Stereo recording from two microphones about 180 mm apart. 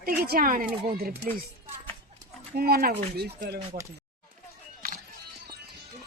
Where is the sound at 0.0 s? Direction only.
55° right (ahead or behind).